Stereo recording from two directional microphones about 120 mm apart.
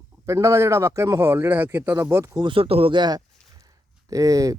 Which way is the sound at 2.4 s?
45° right (ahead or behind).